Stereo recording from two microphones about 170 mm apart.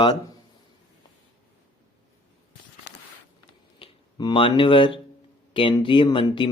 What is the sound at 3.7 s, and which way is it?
Speech, 30° left (ahead or behind).